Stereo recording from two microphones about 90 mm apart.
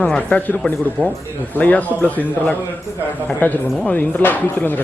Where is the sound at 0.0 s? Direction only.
15° left (ahead or behind).